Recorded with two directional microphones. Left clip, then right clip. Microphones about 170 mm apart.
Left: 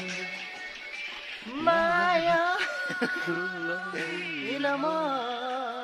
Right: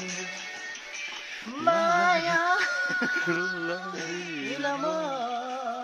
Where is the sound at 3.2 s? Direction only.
10° right (ahead or behind).